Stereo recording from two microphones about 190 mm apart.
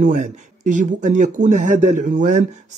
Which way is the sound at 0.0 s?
40° right (ahead or behind).